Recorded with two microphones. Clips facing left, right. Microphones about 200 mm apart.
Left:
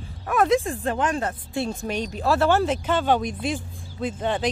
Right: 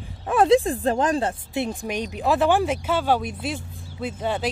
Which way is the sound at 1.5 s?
20° right (ahead or behind).